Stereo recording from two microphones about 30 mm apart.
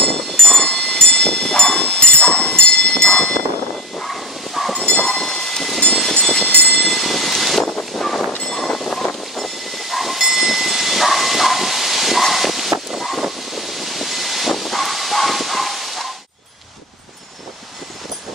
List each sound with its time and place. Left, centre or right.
0.0 s train: centre
0.7 s a sound: centre
0.9 s a sound: centre
2.3 s train: centre
3.1 s a sound: centre
4.0 s bow-wow: centre
4.8 s train: centre
5.1 s train: centre
6.7 s vehicle: centre
7.9 s a sound: centre
8.5 s vehicle: centre
9.0 s train: centre
13.2 s vehicle: centre